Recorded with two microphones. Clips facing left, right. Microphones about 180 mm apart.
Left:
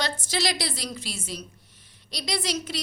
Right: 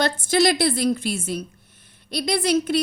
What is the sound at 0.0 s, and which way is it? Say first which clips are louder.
A woman's voice: right 9 dB; 55° right (ahead or behind).